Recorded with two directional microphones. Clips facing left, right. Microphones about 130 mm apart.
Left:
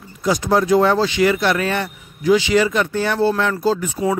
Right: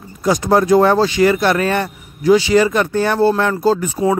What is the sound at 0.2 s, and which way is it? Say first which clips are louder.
Speech: right 3 dB; 50° right (ahead or behind).